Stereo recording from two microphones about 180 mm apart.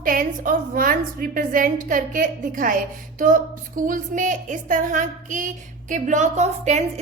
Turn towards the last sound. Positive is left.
turn(degrees=-40)  # may be behind; listen again after turning